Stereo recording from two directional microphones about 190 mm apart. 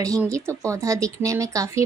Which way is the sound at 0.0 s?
15° right (ahead or behind).